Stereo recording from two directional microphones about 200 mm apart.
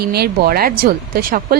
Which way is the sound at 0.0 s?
50° right (ahead or behind).